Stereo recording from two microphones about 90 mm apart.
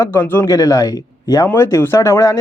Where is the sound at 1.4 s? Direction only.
30° left (ahead or behind).